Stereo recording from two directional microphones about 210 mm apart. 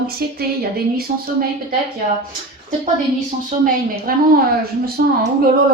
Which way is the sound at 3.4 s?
40° right (ahead or behind).